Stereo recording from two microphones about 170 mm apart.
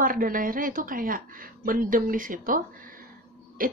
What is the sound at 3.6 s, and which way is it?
Owl, 55° right (ahead or behind).